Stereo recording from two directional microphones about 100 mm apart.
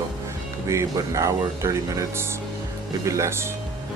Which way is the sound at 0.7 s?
30° right (ahead or behind).